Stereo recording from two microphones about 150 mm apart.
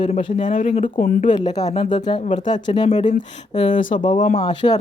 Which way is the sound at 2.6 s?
30° left (ahead or behind).